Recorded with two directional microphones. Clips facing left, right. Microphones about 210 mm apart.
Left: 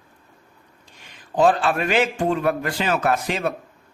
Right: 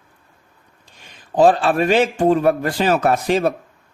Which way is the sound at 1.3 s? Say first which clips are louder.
Right 4 dB; 35° right (ahead or behind).